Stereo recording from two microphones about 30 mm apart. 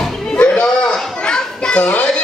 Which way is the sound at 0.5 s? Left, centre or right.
Left.